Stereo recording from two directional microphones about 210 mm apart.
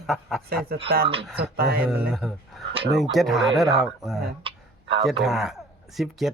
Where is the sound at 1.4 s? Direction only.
50° right (ahead or behind).